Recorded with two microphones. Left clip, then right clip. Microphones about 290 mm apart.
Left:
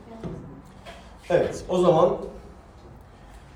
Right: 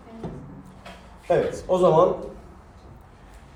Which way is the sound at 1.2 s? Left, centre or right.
Centre.